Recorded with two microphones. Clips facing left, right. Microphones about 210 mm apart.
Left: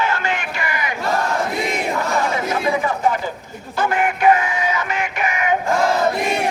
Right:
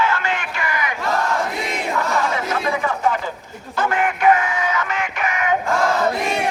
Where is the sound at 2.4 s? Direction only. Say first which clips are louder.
Left 2 dB; 10° left (ahead or behind).